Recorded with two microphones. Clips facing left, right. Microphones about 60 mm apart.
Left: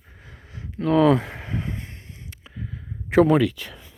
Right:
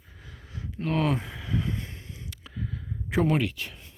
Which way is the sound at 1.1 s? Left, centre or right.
Left.